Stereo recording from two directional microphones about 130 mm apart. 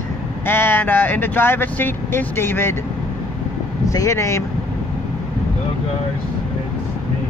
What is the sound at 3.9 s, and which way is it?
Speech, 25° left (ahead or behind).